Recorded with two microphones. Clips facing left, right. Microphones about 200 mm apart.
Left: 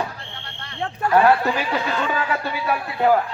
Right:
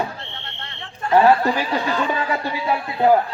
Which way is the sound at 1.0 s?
25° right (ahead or behind).